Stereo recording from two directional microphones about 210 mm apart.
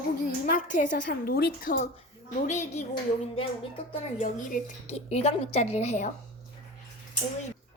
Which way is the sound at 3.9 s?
35° left (ahead or behind).